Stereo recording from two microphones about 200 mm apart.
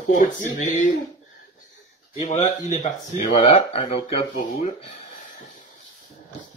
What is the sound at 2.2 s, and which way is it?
Speech, 35° left (ahead or behind).